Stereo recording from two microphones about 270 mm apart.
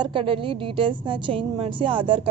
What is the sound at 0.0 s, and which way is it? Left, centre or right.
A woman's voice, centre.